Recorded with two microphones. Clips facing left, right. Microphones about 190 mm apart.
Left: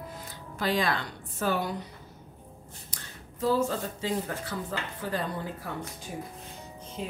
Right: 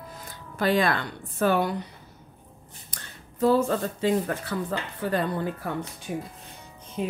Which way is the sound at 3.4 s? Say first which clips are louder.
Right 5 dB; 60° right (ahead or behind).